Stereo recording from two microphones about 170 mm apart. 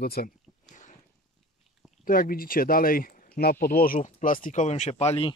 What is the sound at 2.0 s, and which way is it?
Speech, 55° left (ahead or behind).